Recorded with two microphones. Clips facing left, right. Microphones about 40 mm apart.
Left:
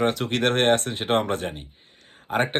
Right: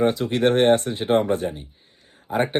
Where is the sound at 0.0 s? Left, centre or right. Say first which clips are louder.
Right 3 dB; left.